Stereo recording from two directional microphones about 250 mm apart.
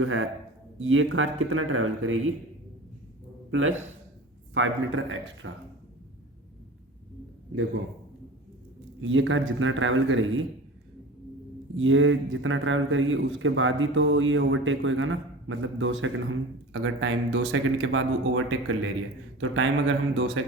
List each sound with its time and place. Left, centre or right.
0.0 s a man's voice: right
4.5 s a man's voice: right
9.0 s a man's voice: right
11.8 s a man's voice: right